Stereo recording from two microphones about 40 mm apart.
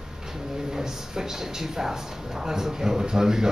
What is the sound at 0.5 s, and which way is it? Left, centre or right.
Speech, centre.